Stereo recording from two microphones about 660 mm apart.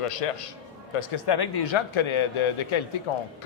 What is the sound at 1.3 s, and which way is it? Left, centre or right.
A man's voice, left.